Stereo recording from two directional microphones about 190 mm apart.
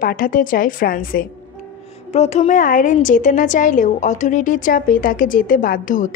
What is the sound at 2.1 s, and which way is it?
A woman's voice, 35° left (ahead or behind).